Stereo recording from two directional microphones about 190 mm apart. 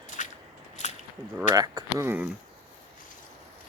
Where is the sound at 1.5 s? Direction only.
20° right (ahead or behind).